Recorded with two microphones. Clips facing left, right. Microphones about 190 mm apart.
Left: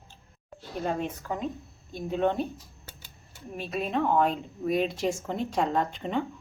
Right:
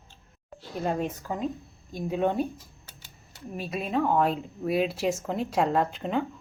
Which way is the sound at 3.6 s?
5° right (ahead or behind).